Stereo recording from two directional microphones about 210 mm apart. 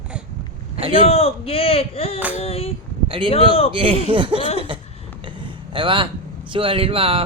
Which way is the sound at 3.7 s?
25° right (ahead or behind).